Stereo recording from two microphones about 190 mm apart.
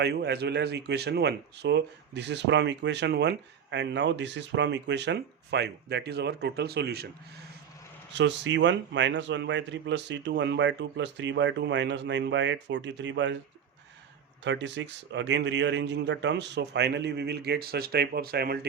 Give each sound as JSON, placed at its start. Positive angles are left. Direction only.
{"t": 0.0, "sound": "speech", "side_deg": -60}
{"t": 8.2, "sound": "a man's voice", "side_deg": -70}
{"t": 14.4, "sound": "speech", "side_deg": -70}